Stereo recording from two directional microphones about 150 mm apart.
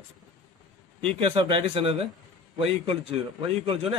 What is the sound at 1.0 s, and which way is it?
Speech, 40° right (ahead or behind).